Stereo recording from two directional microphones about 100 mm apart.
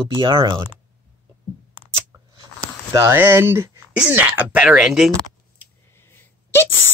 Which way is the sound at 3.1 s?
25° right (ahead or behind).